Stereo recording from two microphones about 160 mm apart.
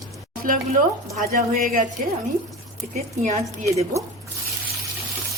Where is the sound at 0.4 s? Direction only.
60° right (ahead or behind).